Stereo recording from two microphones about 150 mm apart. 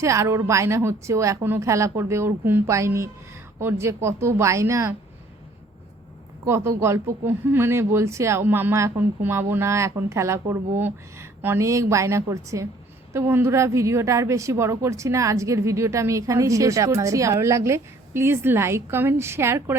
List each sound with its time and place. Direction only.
0.0 s a woman's voice: 20° right (ahead or behind)
6.4 s a woman's voice: 20° right (ahead or behind)